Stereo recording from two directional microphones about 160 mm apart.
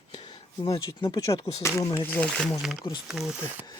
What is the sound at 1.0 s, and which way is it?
Speech, 25° left (ahead or behind).